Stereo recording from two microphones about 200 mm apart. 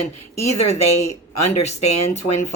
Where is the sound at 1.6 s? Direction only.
35° left (ahead or behind).